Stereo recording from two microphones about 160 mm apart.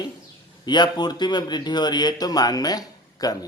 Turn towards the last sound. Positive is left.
turn(degrees=25)  # may be behind; listen again after turning